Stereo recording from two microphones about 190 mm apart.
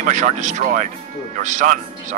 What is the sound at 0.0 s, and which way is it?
A man's voice, 40° right (ahead or behind).